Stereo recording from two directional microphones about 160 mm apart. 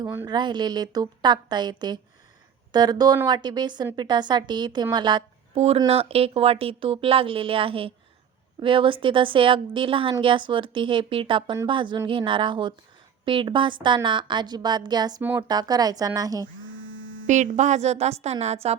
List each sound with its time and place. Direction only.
0.3 s a woman's voice: 25° right (ahead or behind)
15.2 s speech: 10° right (ahead or behind)
15.4 s a woman's voice: 25° right (ahead or behind)
17.2 s a woman's voice: 50° right (ahead or behind)